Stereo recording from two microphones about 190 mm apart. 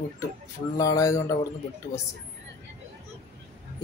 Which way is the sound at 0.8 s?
20° left (ahead or behind).